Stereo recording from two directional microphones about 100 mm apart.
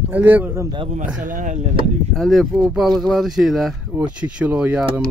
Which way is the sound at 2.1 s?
Centre (ahead or behind).